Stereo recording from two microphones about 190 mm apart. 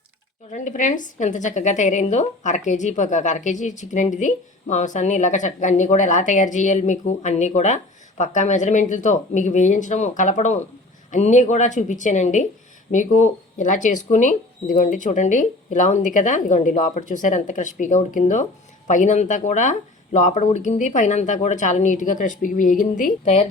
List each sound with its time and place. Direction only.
0.5 s speech: 40° left (ahead or behind)